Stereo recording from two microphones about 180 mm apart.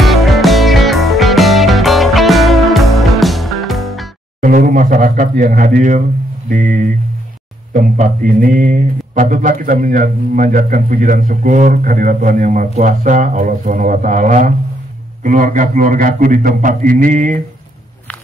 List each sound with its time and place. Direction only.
0.0 s music: centre (ahead or behind)
4.4 s mantra: 50° right (ahead or behind)